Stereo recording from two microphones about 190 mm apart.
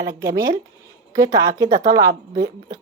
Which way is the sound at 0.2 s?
15° right (ahead or behind).